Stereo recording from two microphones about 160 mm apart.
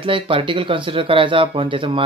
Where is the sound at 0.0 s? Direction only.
35° right (ahead or behind).